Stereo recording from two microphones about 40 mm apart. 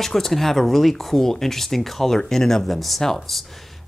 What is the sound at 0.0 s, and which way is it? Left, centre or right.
Speech, centre.